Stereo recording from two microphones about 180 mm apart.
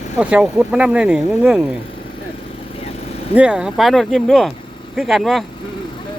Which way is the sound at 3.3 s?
5° right (ahead or behind).